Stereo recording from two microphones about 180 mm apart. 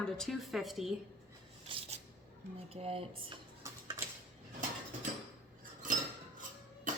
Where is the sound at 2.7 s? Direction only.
35° right (ahead or behind).